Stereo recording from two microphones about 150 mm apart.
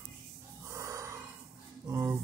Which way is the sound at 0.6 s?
20° right (ahead or behind).